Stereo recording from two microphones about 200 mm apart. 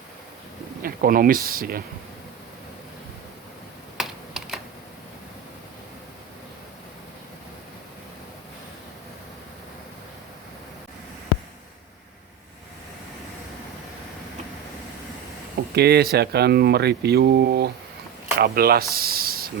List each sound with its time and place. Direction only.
0.8 s speech: 45° right (ahead or behind)
3.9 s computer keyboard: centre (ahead or behind)
15.7 s speech: 55° right (ahead or behind)